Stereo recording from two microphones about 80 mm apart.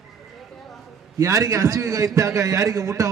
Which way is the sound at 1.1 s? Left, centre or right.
Right.